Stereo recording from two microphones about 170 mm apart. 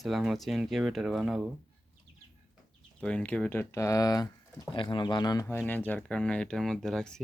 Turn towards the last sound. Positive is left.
turn(degrees=0)  # may be behind; listen again after turning